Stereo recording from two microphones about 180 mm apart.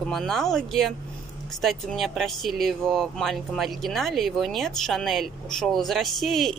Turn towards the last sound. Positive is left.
turn(degrees=0)  # may be behind; listen again after turning